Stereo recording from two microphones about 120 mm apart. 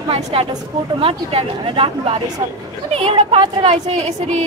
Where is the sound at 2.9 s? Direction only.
60° right (ahead or behind).